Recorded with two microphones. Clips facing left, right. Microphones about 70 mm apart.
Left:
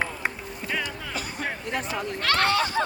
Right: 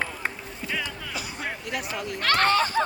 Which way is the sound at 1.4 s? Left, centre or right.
Left.